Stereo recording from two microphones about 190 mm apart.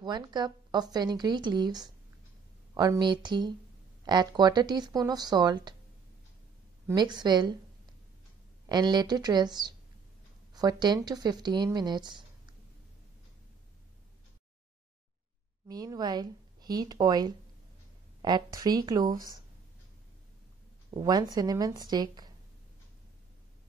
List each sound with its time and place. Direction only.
0.0 s a woman's voice: 20° right (ahead or behind)
6.9 s a woman's voice: 25° right (ahead or behind)
8.6 s a woman's voice: 20° right (ahead or behind)
15.7 s a woman's voice: 20° right (ahead or behind)
20.9 s a woman's voice: 20° right (ahead or behind)